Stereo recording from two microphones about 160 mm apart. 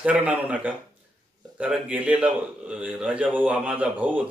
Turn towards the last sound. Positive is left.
turn(degrees=-10)  # may be behind; listen again after turning